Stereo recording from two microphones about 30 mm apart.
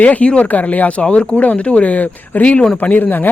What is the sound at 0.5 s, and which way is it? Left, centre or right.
Speech, left.